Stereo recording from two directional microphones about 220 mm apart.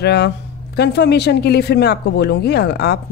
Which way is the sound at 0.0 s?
50° left (ahead or behind).